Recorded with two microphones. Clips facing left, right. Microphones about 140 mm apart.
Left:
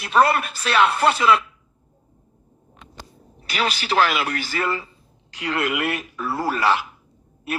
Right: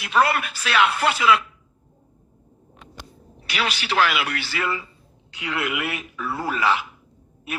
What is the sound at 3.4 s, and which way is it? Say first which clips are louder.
Speech: left 2 dB; 40° left (ahead or behind).